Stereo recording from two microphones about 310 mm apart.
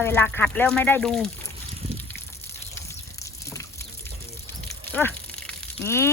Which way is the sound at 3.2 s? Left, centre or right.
Centre.